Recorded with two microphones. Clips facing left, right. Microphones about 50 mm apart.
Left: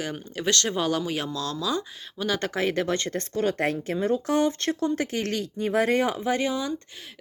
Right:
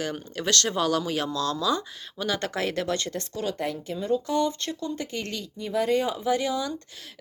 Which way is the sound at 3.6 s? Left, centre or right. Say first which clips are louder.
Left 5 dB; left.